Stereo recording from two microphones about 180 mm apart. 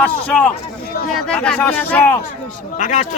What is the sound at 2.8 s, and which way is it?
Speech, 45° left (ahead or behind).